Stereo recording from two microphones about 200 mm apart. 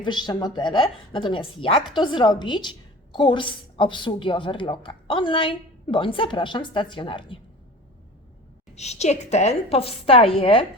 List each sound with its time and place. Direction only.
0.0 s a woman's voice: 20° left (ahead or behind)
8.7 s a woman's voice: 35° left (ahead or behind)